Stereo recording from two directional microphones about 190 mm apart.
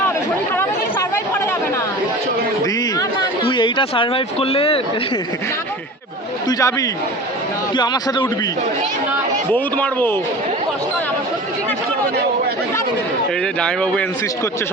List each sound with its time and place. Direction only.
1.1 s chatter: 15° left (ahead or behind)
2.6 s a sound: 20° left (ahead or behind)
6.5 s a man's voice: 15° left (ahead or behind)
9.5 s a man's voice: 10° left (ahead or behind)
13.4 s speech: 5° left (ahead or behind)